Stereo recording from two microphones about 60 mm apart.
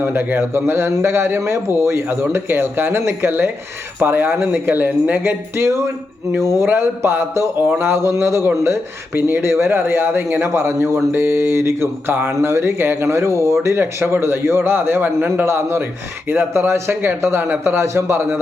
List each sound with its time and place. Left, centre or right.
0.0 s speech: right
6.7 s speech: right